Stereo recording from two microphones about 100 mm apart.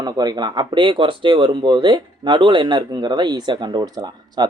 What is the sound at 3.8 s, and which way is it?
Speech, 35° right (ahead or behind).